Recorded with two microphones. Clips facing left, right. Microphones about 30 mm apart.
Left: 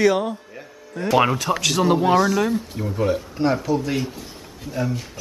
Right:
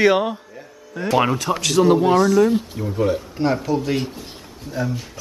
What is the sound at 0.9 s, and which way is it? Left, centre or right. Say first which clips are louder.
A man's voice: even; centre.